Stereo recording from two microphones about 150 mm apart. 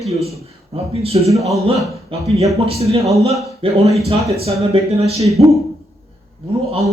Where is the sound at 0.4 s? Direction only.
40° right (ahead or behind).